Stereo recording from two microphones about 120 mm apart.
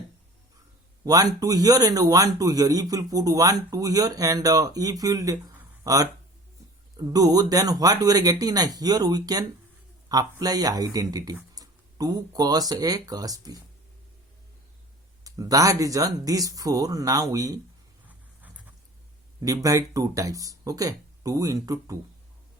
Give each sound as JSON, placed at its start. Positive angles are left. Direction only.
{"t": 1.0, "sound": "speech", "side_deg": -30}
{"t": 15.2, "sound": "speech", "side_deg": -30}
{"t": 18.0, "sound": "a sound", "side_deg": -15}
{"t": 19.4, "sound": "speech", "side_deg": -30}